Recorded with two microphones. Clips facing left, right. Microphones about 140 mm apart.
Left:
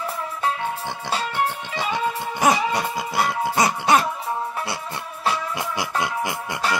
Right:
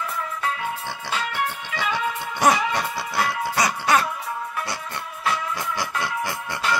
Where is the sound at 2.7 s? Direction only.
15° left (ahead or behind).